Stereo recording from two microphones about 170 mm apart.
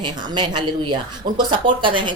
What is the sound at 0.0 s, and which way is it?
A woman's voice, 25° right (ahead or behind).